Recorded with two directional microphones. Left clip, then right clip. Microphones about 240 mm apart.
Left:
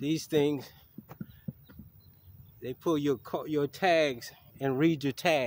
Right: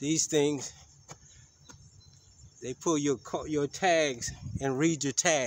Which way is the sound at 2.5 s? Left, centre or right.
Centre.